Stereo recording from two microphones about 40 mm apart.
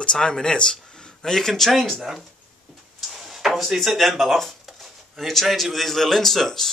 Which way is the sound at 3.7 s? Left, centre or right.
Centre.